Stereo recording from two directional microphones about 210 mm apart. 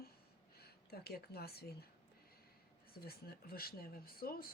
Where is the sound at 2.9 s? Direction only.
45° left (ahead or behind).